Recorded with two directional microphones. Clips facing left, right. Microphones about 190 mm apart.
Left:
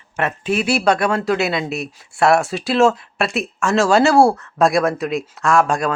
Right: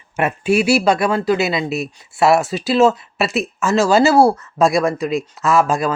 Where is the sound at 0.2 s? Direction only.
10° right (ahead or behind).